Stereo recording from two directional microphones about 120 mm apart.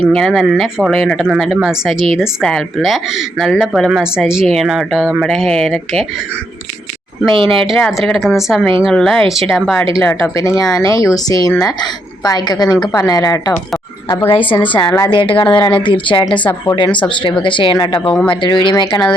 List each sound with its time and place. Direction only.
0.0 s speech: 5° left (ahead or behind)
7.3 s speech: 50° right (ahead or behind)
7.7 s speech: centre (ahead or behind)
10.0 s a woman's voice: 20° left (ahead or behind)
14.3 s speech: 45° left (ahead or behind)
16.4 s speech: 15° left (ahead or behind)
16.7 s a woman's voice: 40° left (ahead or behind)